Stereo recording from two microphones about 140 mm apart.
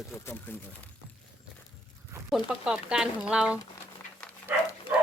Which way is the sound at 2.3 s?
Centre (ahead or behind).